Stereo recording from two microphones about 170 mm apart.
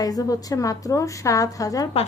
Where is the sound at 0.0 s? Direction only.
20° left (ahead or behind).